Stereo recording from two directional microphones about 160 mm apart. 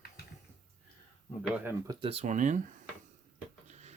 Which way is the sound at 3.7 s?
45° right (ahead or behind).